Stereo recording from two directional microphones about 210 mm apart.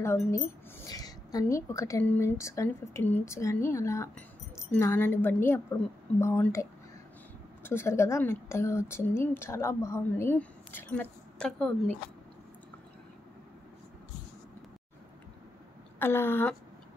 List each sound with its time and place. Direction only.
0.0 s speech: 10° left (ahead or behind)
16.0 s speech: 10° left (ahead or behind)